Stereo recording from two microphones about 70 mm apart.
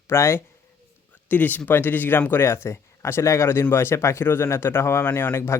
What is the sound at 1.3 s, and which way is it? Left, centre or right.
Speech, left.